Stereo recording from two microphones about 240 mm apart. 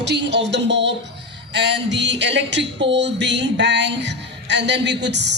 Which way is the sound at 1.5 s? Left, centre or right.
Right.